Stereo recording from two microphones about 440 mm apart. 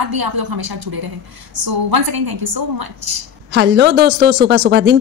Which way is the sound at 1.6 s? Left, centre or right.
Right.